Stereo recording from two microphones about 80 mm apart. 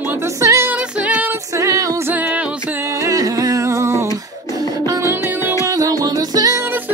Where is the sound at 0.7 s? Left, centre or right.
Right.